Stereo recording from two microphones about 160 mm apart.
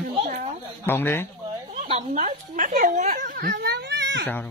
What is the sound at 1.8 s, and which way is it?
Speech, 40° right (ahead or behind).